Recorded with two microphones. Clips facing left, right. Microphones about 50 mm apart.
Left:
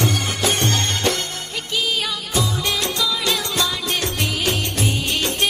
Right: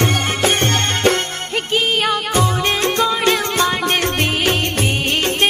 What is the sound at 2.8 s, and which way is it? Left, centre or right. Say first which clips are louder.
Music: right 6 dB; right.